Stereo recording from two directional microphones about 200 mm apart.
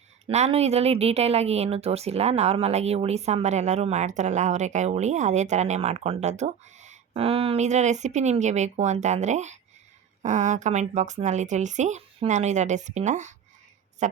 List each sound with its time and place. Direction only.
0.3 s a woman's voice: 30° right (ahead or behind)